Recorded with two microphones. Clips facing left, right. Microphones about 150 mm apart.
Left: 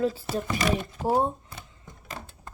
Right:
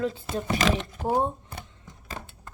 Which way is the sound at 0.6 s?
90° right.